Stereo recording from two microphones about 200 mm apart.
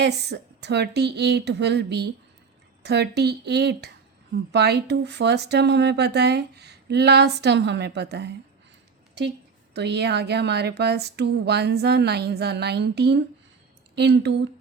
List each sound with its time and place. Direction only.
0.0 s speech: 55° right (ahead or behind)
9.7 s speech: 60° right (ahead or behind)